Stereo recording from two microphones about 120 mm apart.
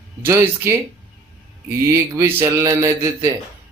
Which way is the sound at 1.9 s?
25° right (ahead or behind).